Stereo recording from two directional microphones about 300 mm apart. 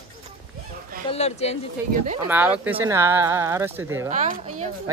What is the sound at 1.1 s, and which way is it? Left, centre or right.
Speech, left.